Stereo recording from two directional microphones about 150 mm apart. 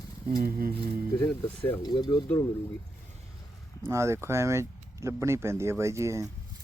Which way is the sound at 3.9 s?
20° right (ahead or behind).